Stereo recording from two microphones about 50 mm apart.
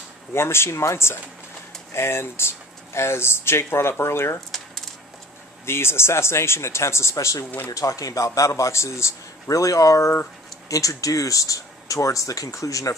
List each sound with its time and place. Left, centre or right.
0.3 s speech: left
5.7 s a man's voice: left